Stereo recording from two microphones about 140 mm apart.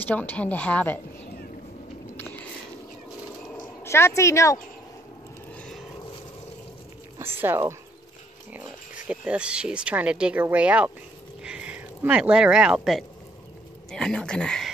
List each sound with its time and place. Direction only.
0.0 s a woman's voice: 10° left (ahead or behind)
2.1 s a sound: 15° left (ahead or behind)
3.8 s a woman's voice: 20° left (ahead or behind)
5.6 s vehicle: 5° left (ahead or behind)
7.2 s a sound: 15° right (ahead or behind)
9.0 s speech: 10° right (ahead or behind)